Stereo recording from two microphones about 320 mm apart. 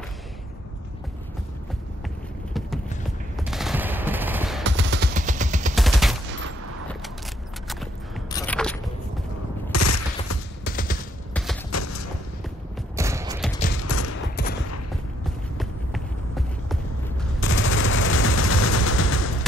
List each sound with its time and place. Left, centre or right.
3.3 s machine gun: centre
4.6 s machine gun: right
5.1 s vehicle: right
5.8 s gunshot: centre
8.3 s a sound: centre
9.7 s fusillade: left
10.6 s a sound: left
11.7 s a sound: left
12.9 s mechanisms: centre
13.8 s fusillade: left
14.1 s fusillade: left
15.5 s run: centre
17.4 s gunshot: left
18.3 s gunshot: left